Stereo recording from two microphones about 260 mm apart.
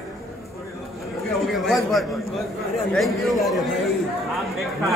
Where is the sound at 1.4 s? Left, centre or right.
Centre.